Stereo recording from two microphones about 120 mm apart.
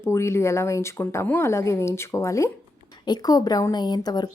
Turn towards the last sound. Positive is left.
turn(degrees=35)  # may be behind; listen again after turning